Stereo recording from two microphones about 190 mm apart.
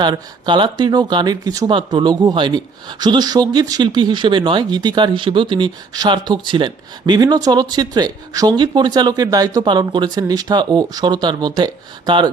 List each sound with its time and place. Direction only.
0.0 s speech: 25° right (ahead or behind)